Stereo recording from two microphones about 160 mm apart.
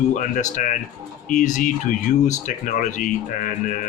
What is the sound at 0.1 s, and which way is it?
Speech, 55° left (ahead or behind).